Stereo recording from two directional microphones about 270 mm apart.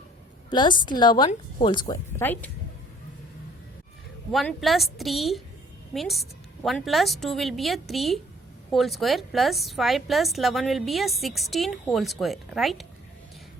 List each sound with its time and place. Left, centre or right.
0.5 s speech: centre
4.3 s a woman's voice: centre